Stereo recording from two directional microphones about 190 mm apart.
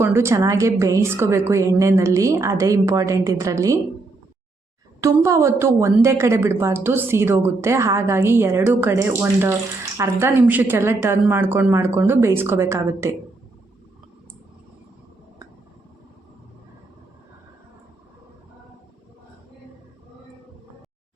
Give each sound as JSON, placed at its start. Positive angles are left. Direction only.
{"t": 0.0, "sound": "a woman's voice", "side_deg": -15}
{"t": 4.9, "sound": "a woman's voice", "side_deg": -15}